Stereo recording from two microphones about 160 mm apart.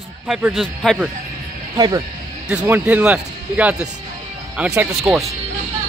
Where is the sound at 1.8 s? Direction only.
25° right (ahead or behind).